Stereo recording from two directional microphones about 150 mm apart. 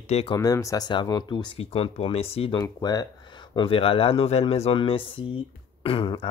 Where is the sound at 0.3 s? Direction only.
25° left (ahead or behind); by 2.6 s 40° left (ahead or behind).